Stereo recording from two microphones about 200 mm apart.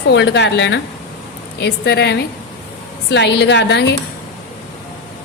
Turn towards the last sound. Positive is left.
turn(degrees=60)  # may be behind; listen again after turning